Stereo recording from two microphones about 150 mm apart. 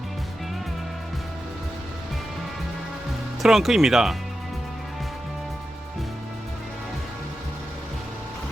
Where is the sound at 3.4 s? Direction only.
Centre (ahead or behind).